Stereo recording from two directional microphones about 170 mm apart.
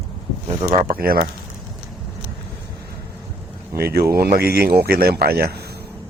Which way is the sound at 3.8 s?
65° right (ahead or behind).